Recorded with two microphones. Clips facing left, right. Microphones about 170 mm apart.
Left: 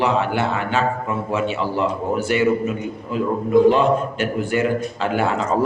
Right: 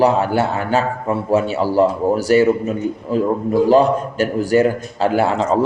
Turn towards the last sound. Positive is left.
turn(degrees=-35)  # may be behind; listen again after turning